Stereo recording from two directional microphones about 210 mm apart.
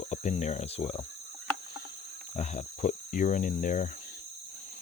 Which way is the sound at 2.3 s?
35° left (ahead or behind).